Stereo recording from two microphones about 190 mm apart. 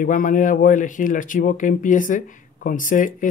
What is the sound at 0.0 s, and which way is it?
A man's voice, 45° left (ahead or behind).